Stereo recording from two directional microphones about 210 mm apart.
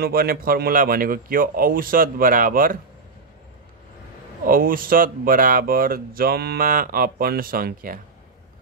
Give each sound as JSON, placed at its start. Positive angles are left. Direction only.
{"t": 0.0, "sound": "speech", "side_deg": -45}
{"t": 4.5, "sound": "speech", "side_deg": -40}